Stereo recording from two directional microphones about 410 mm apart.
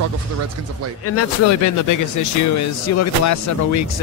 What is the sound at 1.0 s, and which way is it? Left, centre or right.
Speech, left.